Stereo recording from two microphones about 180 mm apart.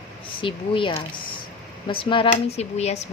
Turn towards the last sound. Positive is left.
turn(degrees=40)  # may be behind; listen again after turning